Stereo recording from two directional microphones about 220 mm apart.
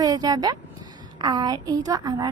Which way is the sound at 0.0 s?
15° right (ahead or behind).